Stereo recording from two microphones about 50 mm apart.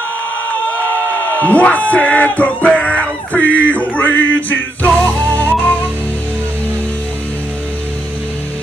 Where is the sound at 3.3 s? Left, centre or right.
Left.